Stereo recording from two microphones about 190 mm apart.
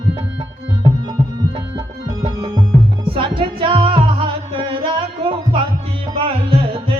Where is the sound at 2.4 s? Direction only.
20° right (ahead or behind).